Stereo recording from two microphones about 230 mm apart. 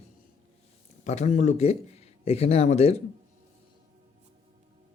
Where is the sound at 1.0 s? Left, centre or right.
Left.